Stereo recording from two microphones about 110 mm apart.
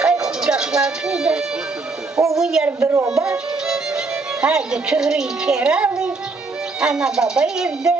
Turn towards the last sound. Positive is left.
turn(degrees=-5)  # may be behind; listen again after turning